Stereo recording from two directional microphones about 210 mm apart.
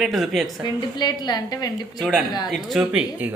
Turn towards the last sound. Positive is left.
turn(degrees=-5)  # may be behind; listen again after turning